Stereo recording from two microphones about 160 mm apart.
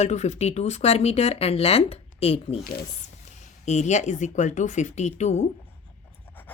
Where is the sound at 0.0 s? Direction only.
45° left (ahead or behind).